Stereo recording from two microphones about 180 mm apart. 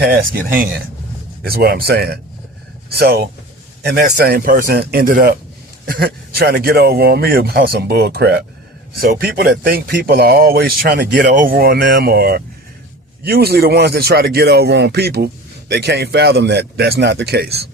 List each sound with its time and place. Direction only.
0.0 s speech: 55° right (ahead or behind)